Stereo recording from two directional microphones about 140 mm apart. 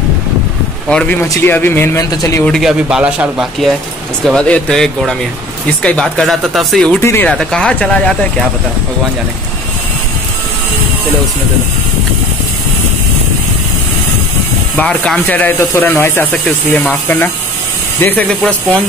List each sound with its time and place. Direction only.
0.8 s speech: 10° left (ahead or behind)
2.4 s speech: centre (ahead or behind)
4.2 s speech: 5° left (ahead or behind)
7.0 s speech: 20° left (ahead or behind)
7.2 s speech: 5° left (ahead or behind)
14.8 s speech: 10° left (ahead or behind)